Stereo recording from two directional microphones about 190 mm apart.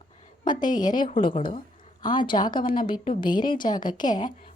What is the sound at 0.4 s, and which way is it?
Speech, 20° left (ahead or behind).